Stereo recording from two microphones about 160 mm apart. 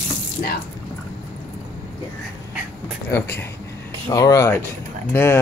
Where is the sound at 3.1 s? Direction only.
20° left (ahead or behind).